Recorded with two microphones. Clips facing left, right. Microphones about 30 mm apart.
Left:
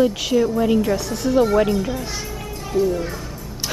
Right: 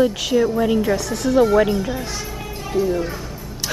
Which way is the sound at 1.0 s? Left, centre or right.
Centre.